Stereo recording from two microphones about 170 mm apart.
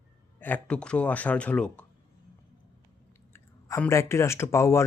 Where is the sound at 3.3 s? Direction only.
15° left (ahead or behind).